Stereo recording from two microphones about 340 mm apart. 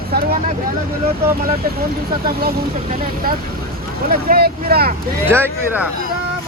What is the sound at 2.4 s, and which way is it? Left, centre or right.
Speech, right.